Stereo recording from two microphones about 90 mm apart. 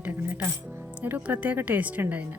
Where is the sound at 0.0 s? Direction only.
20° right (ahead or behind).